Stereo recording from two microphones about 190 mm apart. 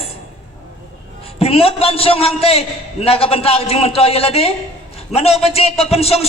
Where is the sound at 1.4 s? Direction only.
30° left (ahead or behind).